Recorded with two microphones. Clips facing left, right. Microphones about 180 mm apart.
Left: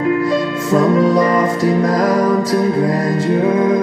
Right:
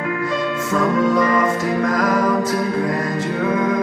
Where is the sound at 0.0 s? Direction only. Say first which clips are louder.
Left 6 dB; 30° left (ahead or behind).